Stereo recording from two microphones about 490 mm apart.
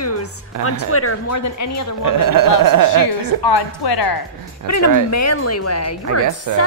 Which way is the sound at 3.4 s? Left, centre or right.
Left.